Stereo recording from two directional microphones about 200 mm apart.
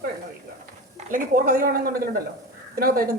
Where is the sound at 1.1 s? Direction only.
45° right (ahead or behind).